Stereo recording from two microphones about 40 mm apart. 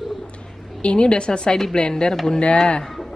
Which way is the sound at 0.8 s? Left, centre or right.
Left.